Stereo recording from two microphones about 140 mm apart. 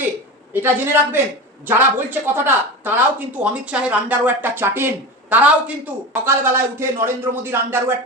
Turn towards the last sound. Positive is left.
turn(degrees=-15)  # may be behind; listen again after turning